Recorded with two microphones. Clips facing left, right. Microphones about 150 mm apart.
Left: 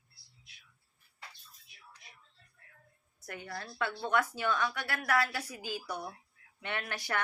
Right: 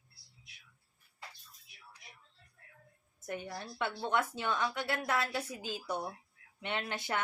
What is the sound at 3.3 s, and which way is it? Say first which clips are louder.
A woman's voice: right 2 dB; 20° right (ahead or behind).